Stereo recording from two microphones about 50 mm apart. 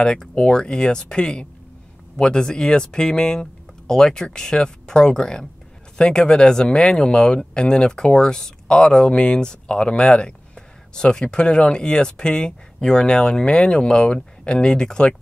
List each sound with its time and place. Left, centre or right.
0.0 s speech: centre